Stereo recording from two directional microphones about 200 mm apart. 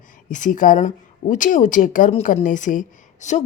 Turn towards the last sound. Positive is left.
turn(degrees=35)  # may be behind; listen again after turning